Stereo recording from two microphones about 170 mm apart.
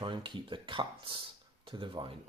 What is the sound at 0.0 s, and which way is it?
Speech, 30° right (ahead or behind).